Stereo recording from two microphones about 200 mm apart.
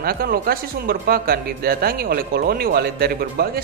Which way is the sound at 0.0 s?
50° right (ahead or behind).